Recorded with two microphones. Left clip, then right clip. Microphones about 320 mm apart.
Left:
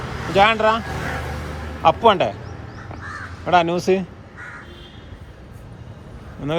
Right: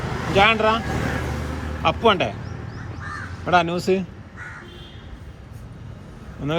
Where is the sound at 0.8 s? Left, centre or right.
Right.